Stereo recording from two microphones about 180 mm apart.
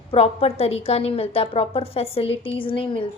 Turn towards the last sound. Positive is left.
turn(degrees=30)  # may be behind; listen again after turning